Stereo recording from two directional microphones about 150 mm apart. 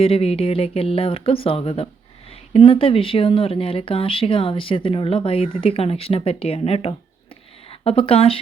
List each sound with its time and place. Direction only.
0.0 s speech: 40° left (ahead or behind)